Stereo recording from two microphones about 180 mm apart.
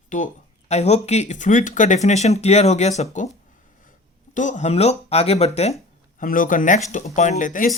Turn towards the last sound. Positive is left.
turn(degrees=45)  # may be behind; listen again after turning